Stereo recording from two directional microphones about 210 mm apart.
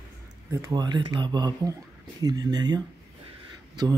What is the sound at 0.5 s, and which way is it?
Speech, 15° right (ahead or behind).